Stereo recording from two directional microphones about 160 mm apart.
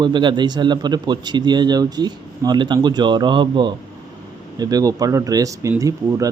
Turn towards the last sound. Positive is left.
turn(degrees=-20)  # may be behind; listen again after turning